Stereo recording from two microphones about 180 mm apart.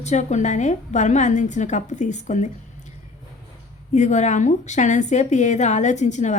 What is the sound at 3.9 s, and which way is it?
A woman's voice, 40° left (ahead or behind).